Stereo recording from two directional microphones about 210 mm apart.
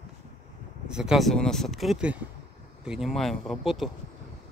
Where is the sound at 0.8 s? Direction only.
5° right (ahead or behind).